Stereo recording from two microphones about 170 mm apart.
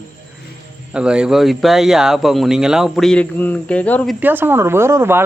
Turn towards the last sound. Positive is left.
turn(degrees=-15)  # may be behind; listen again after turning